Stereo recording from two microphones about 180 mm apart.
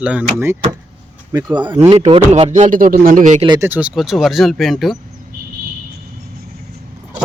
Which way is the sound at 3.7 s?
5° right (ahead or behind).